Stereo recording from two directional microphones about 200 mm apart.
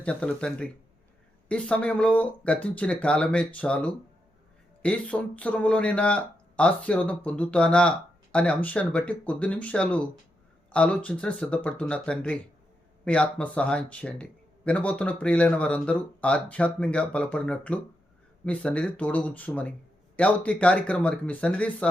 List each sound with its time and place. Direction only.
0.0 s speech: 5° left (ahead or behind)